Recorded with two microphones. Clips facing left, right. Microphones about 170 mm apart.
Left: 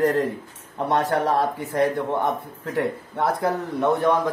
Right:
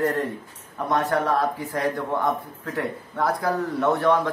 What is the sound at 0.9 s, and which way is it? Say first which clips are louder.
A man's voice: left 1 dB; 30° left (ahead or behind).